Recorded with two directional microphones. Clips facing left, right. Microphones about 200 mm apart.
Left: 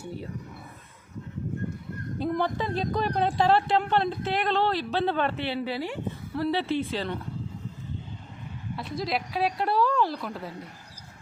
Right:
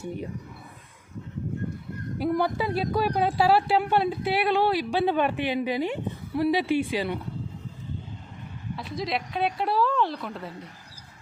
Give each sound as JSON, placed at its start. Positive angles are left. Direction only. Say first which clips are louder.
{"t": 0.0, "sound": "speech", "louder": "right 4 dB", "side_deg": -15}
{"t": 2.1, "sound": "speech", "louder": "right 2 dB", "side_deg": -10}
{"t": 8.7, "sound": "a woman's voice", "louder": "even", "side_deg": 0}